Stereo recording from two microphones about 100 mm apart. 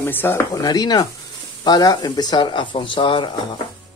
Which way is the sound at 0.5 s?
40° left (ahead or behind).